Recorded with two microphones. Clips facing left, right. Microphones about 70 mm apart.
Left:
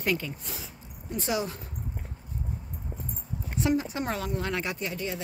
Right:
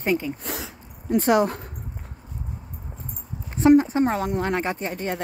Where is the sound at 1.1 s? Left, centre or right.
Right.